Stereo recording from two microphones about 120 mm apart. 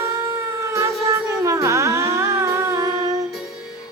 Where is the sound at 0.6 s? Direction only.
25° right (ahead or behind).